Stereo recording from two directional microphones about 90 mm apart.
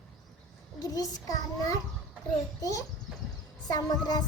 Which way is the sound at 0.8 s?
40° left (ahead or behind).